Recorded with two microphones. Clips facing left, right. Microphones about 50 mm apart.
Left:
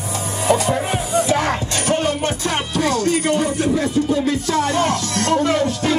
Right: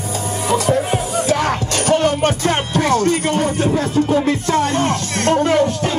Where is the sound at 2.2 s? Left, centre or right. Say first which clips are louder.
Right 4 dB; right.